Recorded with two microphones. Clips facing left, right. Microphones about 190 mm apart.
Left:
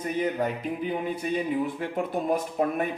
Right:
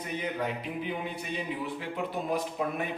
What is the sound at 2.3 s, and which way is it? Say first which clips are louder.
Speech: left 6 dB; 50° left (ahead or behind).